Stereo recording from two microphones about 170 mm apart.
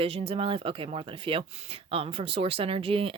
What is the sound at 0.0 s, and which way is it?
Speech, 35° right (ahead or behind).